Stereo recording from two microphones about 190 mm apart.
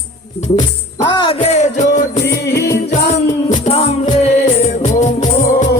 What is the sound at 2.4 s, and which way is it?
Music, 60° left (ahead or behind).